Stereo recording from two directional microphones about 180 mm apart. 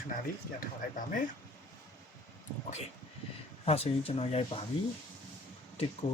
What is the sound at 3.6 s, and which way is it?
Speech, 35° left (ahead or behind).